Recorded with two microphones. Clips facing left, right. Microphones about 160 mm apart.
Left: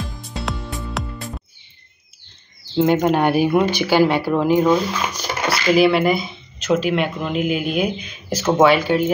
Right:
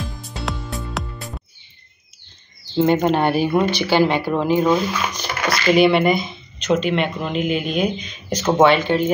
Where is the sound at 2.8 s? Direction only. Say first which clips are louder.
Even; 5° left (ahead or behind).